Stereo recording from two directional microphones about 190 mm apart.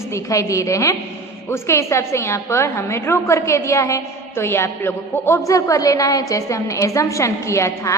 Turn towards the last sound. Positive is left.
turn(degrees=15)  # may be behind; listen again after turning